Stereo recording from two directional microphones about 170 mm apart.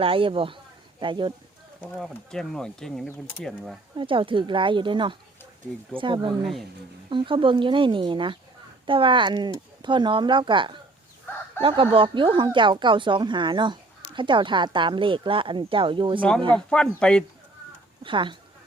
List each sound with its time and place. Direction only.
0.0 s speech: 30° right (ahead or behind)
2.0 s speech: centre (ahead or behind)
3.9 s speech: 30° right (ahead or behind)
6.4 s speech: centre (ahead or behind)
7.1 s speech: 30° right (ahead or behind)
16.6 s speech: 5° left (ahead or behind)
18.0 s speech: 30° right (ahead or behind)